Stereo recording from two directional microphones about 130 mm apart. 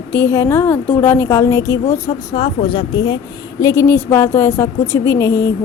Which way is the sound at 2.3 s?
40° left (ahead or behind).